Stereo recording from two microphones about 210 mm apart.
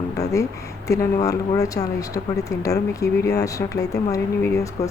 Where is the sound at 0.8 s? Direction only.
15° left (ahead or behind).